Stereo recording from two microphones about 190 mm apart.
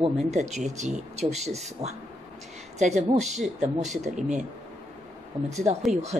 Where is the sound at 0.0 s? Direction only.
35° right (ahead or behind).